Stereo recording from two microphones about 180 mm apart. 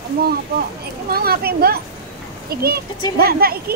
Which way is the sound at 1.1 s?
60° right (ahead or behind).